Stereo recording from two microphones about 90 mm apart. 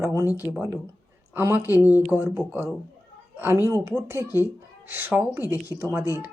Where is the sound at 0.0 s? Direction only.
35° right (ahead or behind).